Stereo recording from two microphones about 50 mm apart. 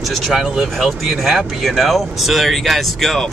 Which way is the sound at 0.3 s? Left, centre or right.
Centre.